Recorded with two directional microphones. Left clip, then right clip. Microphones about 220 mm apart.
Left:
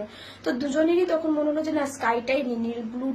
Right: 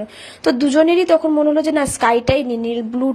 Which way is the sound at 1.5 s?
40° right (ahead or behind).